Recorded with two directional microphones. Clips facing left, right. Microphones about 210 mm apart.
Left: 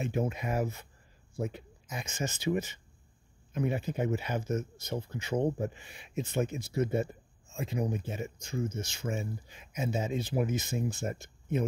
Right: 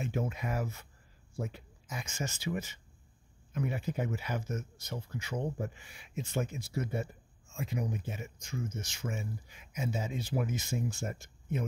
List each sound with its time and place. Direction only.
0.0 s speech: 20° left (ahead or behind)